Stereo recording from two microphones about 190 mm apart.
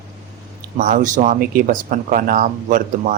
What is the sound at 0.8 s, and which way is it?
Speech, 45° right (ahead or behind).